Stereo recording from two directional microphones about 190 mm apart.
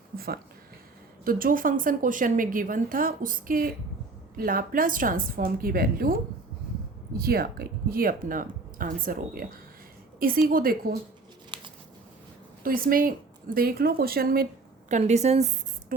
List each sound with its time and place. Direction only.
1.2 s a woman's voice: 50° right (ahead or behind)
7.2 s a woman's voice: 55° right (ahead or behind)
11.5 s a sound: 25° right (ahead or behind)
12.6 s a woman's voice: 50° right (ahead or behind)
14.8 s speech: 40° right (ahead or behind)